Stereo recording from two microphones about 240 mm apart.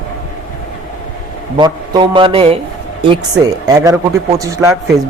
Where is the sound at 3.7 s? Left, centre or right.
Centre.